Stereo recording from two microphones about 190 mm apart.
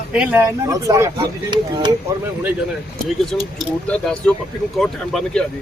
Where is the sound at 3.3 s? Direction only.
Centre (ahead or behind).